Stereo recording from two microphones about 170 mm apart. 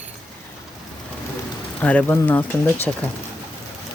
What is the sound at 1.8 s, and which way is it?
Speech, 10° left (ahead or behind).